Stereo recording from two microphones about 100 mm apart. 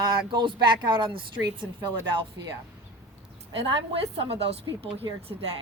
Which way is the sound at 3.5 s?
75° right (ahead or behind).